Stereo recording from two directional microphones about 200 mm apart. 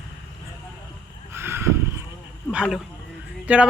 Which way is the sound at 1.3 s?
10° right (ahead or behind).